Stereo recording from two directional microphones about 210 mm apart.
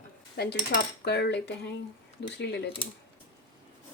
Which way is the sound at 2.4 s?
50° left (ahead or behind).